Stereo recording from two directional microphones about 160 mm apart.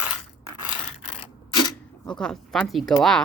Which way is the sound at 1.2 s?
30° left (ahead or behind).